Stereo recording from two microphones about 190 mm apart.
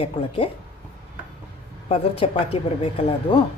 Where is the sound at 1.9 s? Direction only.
30° left (ahead or behind).